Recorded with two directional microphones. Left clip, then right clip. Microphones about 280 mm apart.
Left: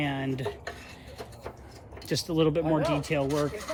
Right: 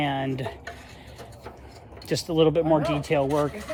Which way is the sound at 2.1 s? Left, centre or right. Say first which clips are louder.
Right 5 dB; centre.